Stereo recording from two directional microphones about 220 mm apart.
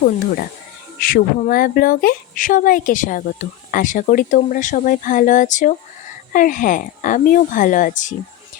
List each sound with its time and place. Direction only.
0.9 s speech: 40° left (ahead or behind)